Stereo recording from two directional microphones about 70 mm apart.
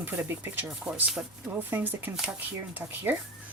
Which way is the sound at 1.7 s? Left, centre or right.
Right.